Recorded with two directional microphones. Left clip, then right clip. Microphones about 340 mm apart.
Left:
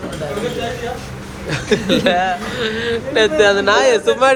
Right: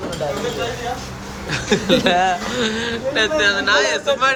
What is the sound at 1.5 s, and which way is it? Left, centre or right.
A man's voice, centre.